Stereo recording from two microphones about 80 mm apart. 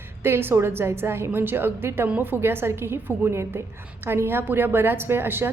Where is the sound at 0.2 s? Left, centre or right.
Right.